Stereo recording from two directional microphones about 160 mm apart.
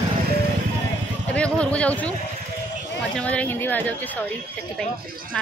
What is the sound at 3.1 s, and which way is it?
Music, 10° left (ahead or behind).